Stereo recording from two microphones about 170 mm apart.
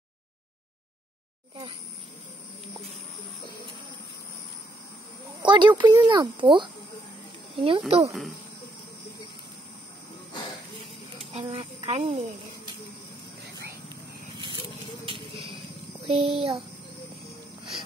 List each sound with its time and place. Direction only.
5.4 s speech: 25° right (ahead or behind)
11.3 s a woman's voice: 35° right (ahead or behind)
16.1 s a woman's voice: 35° right (ahead or behind)